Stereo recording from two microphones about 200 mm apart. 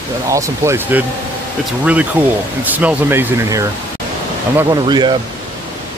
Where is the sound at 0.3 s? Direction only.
15° right (ahead or behind).